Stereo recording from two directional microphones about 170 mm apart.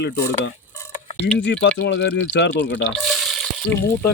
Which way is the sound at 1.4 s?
90° left.